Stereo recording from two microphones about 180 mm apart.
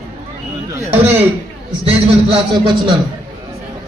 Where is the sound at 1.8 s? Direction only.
30° right (ahead or behind).